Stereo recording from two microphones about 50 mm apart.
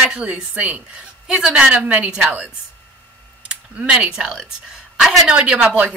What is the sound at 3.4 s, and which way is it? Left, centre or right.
Speech, right.